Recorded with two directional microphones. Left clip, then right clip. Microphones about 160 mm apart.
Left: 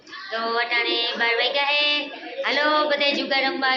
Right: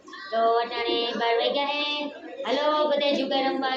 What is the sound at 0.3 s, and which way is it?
Child singing, centre (ahead or behind).